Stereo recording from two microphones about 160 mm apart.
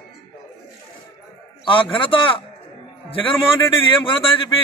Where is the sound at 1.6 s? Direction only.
30° left (ahead or behind).